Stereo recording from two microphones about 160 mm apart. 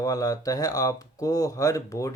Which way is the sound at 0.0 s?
20° left (ahead or behind).